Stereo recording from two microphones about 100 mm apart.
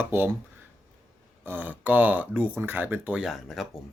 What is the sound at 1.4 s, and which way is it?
Speech, 20° right (ahead or behind).